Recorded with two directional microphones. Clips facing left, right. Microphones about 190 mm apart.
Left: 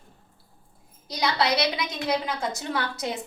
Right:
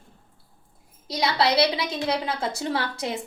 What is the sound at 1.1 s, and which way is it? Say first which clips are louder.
A woman's voice: right 2 dB; 25° right (ahead or behind).